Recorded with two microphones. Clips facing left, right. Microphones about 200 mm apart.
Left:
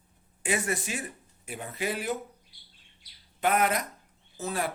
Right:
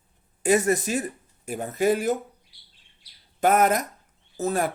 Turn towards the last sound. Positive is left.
turn(degrees=-45)  # may be behind; listen again after turning